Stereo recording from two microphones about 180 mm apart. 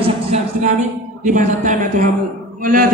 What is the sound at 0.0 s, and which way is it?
A woman's voice, 40° right (ahead or behind).